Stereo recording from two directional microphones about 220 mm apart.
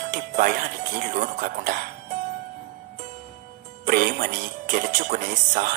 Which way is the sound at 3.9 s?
40° right (ahead or behind).